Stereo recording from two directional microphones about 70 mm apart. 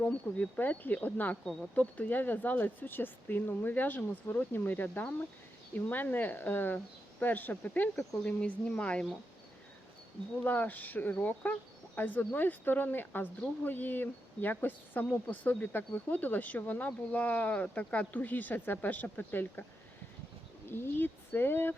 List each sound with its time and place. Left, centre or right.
0.0 s speech: left
10.4 s speech: left
20.7 s speech: left